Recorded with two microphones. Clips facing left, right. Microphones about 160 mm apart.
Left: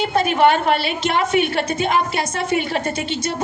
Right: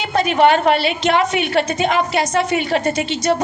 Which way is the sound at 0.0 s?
50° left (ahead or behind).